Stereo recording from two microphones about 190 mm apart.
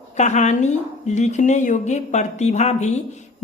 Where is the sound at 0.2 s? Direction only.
40° left (ahead or behind).